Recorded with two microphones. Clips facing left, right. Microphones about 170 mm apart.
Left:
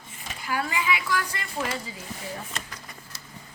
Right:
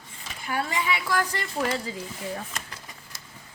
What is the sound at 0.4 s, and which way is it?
Speech, 25° right (ahead or behind).